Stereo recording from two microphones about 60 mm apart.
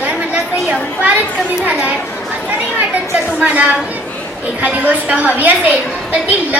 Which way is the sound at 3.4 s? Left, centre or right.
Right.